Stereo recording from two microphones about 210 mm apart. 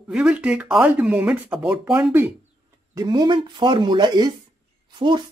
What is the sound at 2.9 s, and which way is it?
Speech, 20° right (ahead or behind).